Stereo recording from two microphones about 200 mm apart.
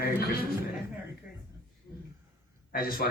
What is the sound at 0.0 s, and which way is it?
Speech, 45° left (ahead or behind).